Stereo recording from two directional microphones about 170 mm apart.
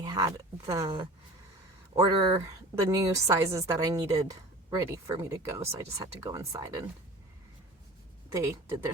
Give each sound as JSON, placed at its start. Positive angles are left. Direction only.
{"t": 0.0, "sound": "speech", "side_deg": -20}
{"t": 2.0, "sound": "a woman's voice", "side_deg": -25}
{"t": 8.3, "sound": "speech", "side_deg": -15}